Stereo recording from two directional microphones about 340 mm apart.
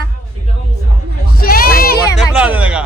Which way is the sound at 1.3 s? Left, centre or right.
Left.